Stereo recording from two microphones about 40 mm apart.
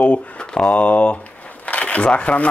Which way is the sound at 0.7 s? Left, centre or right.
Left.